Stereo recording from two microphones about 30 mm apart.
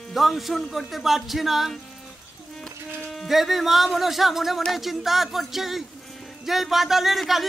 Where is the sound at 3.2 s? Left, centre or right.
Centre.